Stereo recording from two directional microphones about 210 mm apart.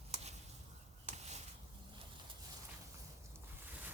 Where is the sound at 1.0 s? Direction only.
30° right (ahead or behind).